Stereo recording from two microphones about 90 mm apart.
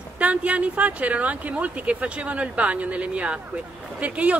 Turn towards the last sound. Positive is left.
turn(degrees=-15)  # may be behind; listen again after turning